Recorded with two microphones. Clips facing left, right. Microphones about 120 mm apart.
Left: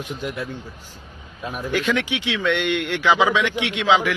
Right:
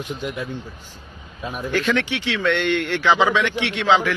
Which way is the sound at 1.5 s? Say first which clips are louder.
Right 1 dB; 10° left (ahead or behind).